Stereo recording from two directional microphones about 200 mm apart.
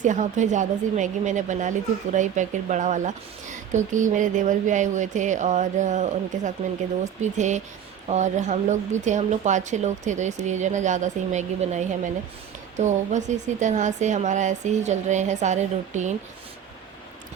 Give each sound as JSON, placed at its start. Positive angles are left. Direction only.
{"t": 0.0, "sound": "speech", "side_deg": -40}